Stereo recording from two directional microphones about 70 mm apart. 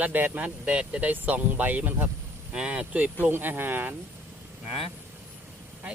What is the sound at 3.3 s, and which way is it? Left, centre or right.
Speech, right.